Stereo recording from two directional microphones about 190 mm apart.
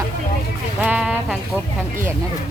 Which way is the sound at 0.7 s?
5° right (ahead or behind).